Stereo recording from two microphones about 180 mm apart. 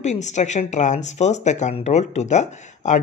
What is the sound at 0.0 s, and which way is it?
Speech, 40° left (ahead or behind).